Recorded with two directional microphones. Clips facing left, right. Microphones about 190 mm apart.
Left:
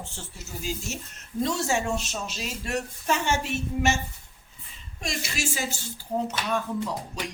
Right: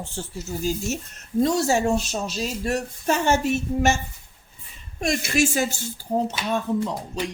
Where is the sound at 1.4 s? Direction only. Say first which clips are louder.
Right 6 dB; 40° right (ahead or behind).